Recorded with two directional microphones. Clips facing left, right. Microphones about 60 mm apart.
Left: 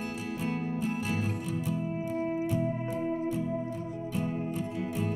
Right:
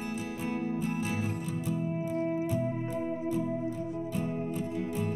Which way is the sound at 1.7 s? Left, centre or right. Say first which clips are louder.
Even; left.